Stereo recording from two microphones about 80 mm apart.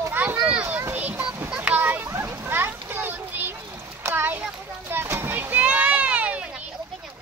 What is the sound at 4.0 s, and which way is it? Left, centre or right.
Splash, right.